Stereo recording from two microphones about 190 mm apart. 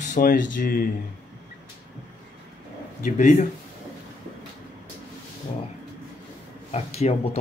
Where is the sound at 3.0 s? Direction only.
40° left (ahead or behind).